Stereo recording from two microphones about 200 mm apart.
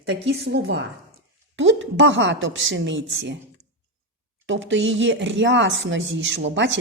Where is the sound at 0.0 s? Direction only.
60° right (ahead or behind).